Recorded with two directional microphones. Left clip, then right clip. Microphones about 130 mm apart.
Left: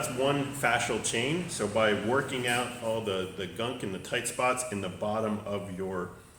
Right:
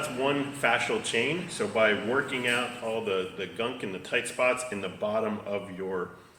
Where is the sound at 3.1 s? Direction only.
40° left (ahead or behind).